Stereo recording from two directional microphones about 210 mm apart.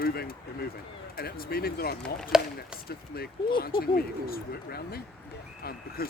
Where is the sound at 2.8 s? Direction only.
45° left (ahead or behind).